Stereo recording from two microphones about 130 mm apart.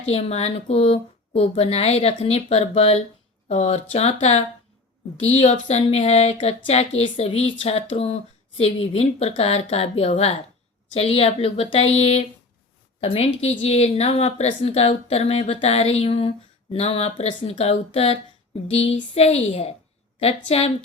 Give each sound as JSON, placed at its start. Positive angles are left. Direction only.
{"t": 0.1, "sound": "a woman's voice", "side_deg": 55}